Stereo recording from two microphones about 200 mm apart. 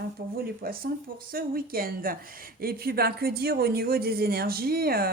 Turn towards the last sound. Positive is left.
turn(degrees=-50)  # may be behind; listen again after turning